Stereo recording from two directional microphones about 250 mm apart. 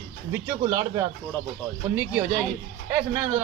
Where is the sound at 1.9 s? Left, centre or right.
Centre.